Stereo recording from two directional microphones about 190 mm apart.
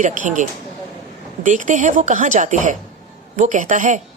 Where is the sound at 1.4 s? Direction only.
40° right (ahead or behind).